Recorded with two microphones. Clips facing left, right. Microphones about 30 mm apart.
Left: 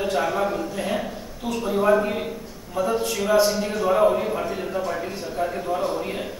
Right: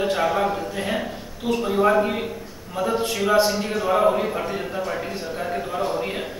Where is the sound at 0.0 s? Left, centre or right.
Centre.